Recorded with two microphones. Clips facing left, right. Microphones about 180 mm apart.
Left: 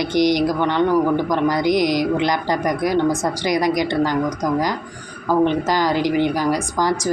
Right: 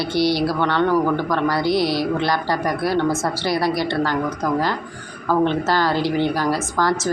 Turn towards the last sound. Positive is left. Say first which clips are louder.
# even
turn(degrees=15)  # may be behind; listen again after turning